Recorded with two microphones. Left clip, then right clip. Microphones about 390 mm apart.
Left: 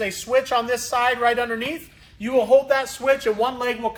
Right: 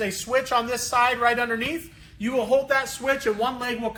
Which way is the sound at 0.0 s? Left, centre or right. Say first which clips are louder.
Left 3 dB; centre.